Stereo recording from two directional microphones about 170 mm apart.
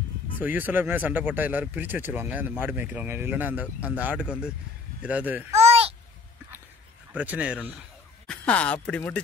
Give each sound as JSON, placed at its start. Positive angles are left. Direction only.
{"t": 0.4, "sound": "speech", "side_deg": -10}
{"t": 5.5, "sound": "babbling", "side_deg": -40}
{"t": 7.2, "sound": "speech", "side_deg": -10}
{"t": 8.3, "sound": "speech", "side_deg": 5}